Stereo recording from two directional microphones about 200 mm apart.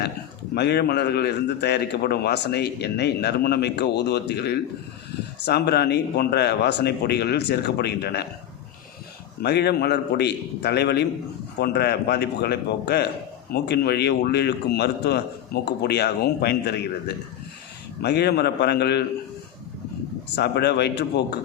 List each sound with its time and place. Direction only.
0.5 s a man's voice: 55° left (ahead or behind)
9.4 s a man's voice: 55° left (ahead or behind)
20.3 s a man's voice: 55° left (ahead or behind)